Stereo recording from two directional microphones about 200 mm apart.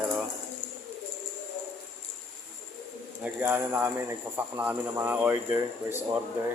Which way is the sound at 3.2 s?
10° right (ahead or behind).